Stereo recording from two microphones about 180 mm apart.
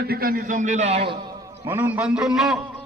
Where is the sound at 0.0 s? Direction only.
55° right (ahead or behind); by 1.1 s 35° right (ahead or behind).